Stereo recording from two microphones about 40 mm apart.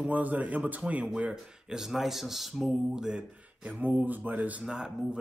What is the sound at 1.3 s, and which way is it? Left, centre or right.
Speech, centre.